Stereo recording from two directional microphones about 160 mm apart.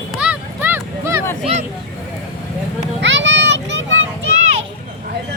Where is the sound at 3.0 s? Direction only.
90° right.